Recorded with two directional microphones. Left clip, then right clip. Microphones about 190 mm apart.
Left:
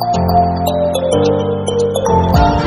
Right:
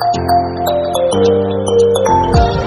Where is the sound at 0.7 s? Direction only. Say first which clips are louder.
Right 1 dB; centre (ahead or behind).